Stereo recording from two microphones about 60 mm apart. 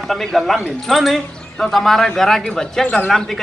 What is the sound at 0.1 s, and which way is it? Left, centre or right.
A man's voice, centre.